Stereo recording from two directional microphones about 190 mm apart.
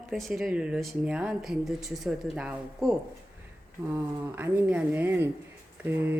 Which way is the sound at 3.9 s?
10° right (ahead or behind).